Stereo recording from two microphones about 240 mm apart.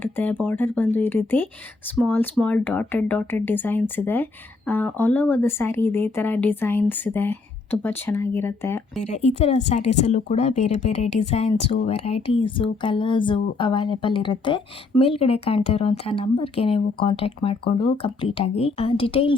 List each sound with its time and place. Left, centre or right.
0.0 s speech: centre
9.0 s speech: left